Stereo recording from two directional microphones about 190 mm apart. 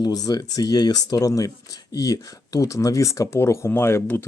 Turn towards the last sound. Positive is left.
turn(degrees=15)  # may be behind; listen again after turning